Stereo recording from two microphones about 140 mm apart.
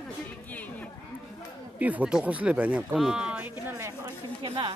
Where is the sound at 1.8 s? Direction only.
10° right (ahead or behind).